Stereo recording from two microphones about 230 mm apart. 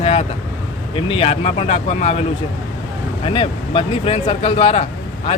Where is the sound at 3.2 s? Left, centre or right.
Left.